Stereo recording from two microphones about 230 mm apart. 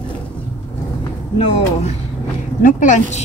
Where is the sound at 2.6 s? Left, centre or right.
Left.